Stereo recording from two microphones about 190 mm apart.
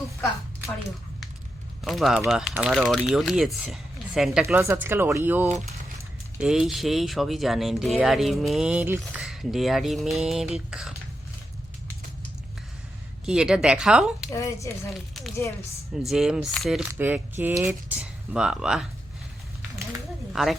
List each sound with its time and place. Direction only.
1.8 s speech: centre (ahead or behind)
4.4 s speech: 15° right (ahead or behind)
13.2 s speech: 5° right (ahead or behind)
14.3 s speech: 15° left (ahead or behind)
14.8 s speech: centre (ahead or behind)
20.3 s a woman's voice: centre (ahead or behind)